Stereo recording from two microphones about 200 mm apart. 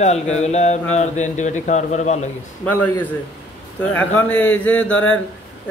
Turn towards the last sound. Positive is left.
turn(degrees=5)  # may be behind; listen again after turning